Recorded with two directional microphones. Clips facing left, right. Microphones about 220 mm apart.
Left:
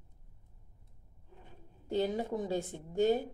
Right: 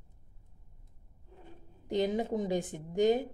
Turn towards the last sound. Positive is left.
turn(degrees=-15)  # may be behind; listen again after turning